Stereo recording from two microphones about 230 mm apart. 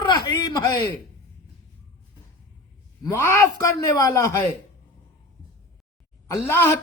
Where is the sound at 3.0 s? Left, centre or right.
Centre.